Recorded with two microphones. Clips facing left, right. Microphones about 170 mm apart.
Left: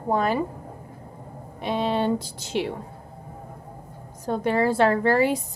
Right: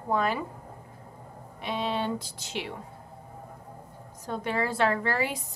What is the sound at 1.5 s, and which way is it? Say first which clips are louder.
A woman's voice: left 6 dB; 40° left (ahead or behind).